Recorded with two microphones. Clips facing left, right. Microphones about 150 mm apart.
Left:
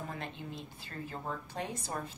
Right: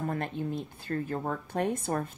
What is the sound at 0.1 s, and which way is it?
A woman's voice, 50° right (ahead or behind).